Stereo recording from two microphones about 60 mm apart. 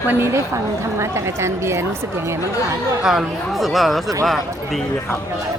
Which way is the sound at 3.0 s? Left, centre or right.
Centre.